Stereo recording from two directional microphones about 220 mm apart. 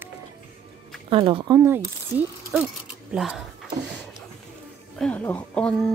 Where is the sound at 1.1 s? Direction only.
25° right (ahead or behind).